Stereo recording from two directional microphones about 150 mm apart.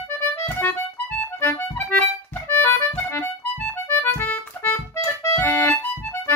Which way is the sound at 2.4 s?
15° left (ahead or behind).